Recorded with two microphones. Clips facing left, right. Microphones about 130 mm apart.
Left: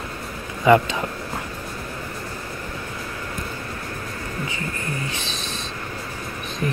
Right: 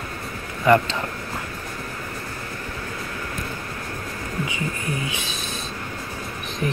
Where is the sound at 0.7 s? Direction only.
15° left (ahead or behind).